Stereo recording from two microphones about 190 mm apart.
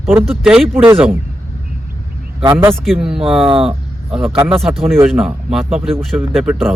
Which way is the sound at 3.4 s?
30° right (ahead or behind).